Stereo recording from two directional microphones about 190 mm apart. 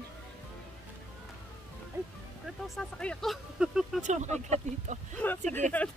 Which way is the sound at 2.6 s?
Centre (ahead or behind).